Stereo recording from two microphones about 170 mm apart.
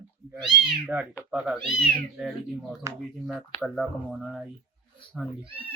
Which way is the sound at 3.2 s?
Centre (ahead or behind).